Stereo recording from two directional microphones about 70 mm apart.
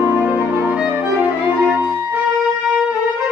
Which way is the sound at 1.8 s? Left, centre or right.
Right.